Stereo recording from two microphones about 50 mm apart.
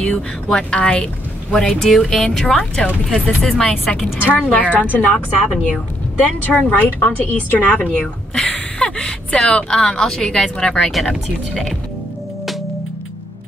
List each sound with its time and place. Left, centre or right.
0.5 s speech: centre
4.2 s a woman's voice: left
5.1 s speech: centre
6.2 s speech: left
10.9 s speech: centre